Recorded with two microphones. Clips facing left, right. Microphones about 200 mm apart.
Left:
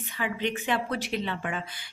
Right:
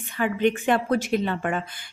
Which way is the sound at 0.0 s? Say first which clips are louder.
Right 8 dB; 50° right (ahead or behind).